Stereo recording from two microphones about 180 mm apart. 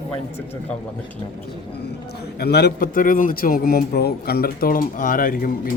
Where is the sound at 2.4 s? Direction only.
65° left (ahead or behind).